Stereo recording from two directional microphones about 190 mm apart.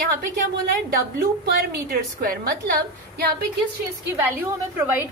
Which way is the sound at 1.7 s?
50° right (ahead or behind).